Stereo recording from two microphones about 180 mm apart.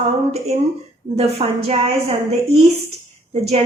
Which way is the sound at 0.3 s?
35° right (ahead or behind).